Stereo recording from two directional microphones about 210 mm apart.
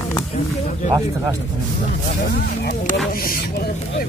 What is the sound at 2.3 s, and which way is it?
Speech, 50° left (ahead or behind).